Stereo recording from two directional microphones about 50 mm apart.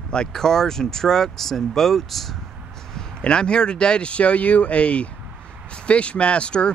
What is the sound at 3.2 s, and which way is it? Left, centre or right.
Speech, centre.